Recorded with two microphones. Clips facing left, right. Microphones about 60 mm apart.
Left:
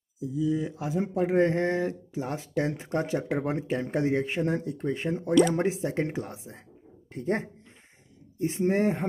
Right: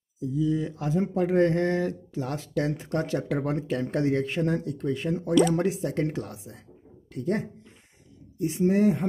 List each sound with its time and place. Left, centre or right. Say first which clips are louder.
0.2 s speech: right 1 dB; centre; by 9.0 s left